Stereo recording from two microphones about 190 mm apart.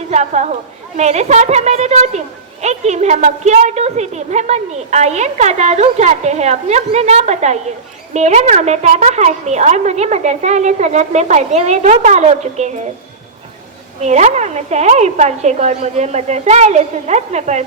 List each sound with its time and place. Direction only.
0.1 s a woman's voice: 35° right (ahead or behind)
14.0 s speech: 35° right (ahead or behind)